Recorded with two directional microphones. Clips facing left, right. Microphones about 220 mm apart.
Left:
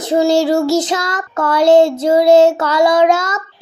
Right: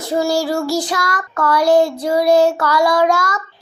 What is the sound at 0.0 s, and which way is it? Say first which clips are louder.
Child singing: left 5 dB; 20° left (ahead or behind).